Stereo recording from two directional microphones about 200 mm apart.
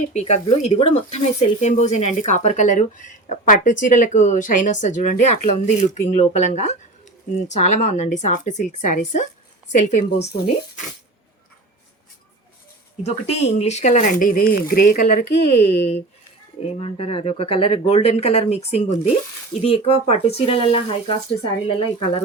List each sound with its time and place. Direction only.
0.1 s speech: 35° left (ahead or behind)
10.2 s speech: 55° left (ahead or behind)
13.0 s speech: 30° left (ahead or behind)